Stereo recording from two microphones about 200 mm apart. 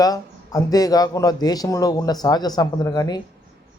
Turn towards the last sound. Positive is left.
turn(degrees=20)  # may be behind; listen again after turning